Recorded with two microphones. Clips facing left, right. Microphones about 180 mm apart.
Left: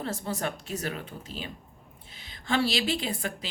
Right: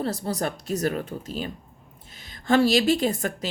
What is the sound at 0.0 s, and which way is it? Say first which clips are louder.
Speech: right 5 dB; 35° right (ahead or behind).